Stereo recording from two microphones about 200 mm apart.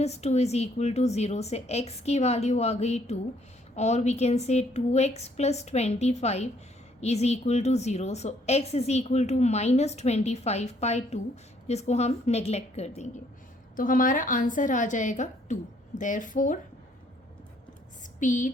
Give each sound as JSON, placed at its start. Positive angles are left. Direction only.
{"t": 0.0, "sound": "a woman's voice", "side_deg": 30}
{"t": 13.7, "sound": "a woman's voice", "side_deg": 45}
{"t": 18.2, "sound": "a woman's voice", "side_deg": 40}